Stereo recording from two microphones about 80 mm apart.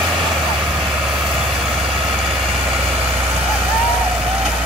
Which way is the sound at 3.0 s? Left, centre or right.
Right.